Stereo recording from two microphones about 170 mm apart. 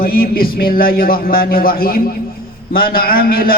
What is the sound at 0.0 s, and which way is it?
A man's voice, 60° left (ahead or behind).